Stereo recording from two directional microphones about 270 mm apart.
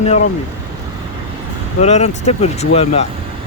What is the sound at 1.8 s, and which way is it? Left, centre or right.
Speech, left.